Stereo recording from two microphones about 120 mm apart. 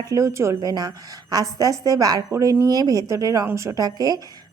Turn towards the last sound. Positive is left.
turn(degrees=-30)  # may be behind; listen again after turning